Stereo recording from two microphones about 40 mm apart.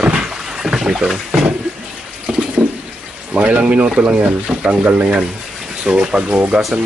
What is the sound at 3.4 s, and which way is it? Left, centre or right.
Speech, right.